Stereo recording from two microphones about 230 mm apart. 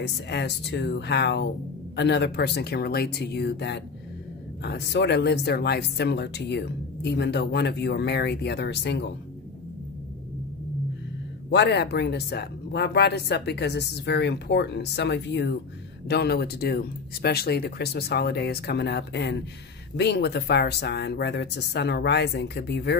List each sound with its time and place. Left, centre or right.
0.0 s speech: left
11.5 s speech: left